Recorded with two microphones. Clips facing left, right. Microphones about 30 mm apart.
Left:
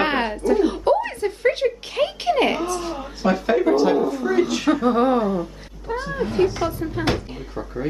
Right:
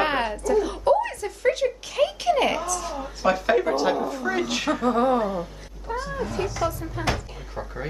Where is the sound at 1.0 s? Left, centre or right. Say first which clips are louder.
Left 6 dB; left.